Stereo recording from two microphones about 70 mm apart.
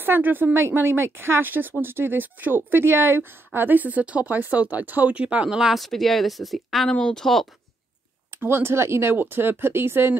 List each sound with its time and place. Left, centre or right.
0.0 s speech: right; by 5.9 s centre
5.9 s speech: centre
6.9 s speech: centre
8.3 s speech: right